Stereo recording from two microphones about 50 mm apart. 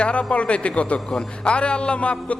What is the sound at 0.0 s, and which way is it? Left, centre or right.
Speech, left.